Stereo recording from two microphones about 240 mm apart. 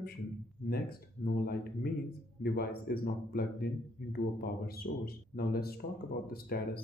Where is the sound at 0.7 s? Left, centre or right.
Left.